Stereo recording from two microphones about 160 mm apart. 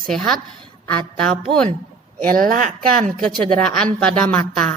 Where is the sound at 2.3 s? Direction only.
60° right (ahead or behind).